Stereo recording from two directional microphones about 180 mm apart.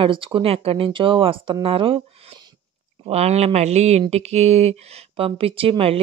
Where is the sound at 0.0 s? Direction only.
30° right (ahead or behind).